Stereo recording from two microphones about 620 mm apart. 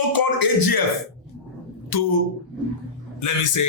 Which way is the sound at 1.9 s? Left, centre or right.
Left.